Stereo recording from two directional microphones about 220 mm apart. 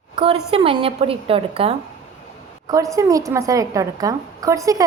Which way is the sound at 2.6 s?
15° right (ahead or behind).